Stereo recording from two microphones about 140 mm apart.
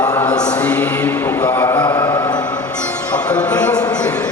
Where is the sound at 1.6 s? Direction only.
25° left (ahead or behind).